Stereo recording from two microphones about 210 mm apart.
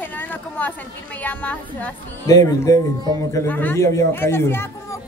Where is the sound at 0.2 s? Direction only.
10° left (ahead or behind).